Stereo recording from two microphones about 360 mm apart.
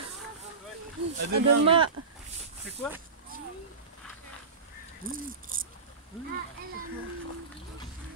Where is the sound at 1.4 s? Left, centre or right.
Right.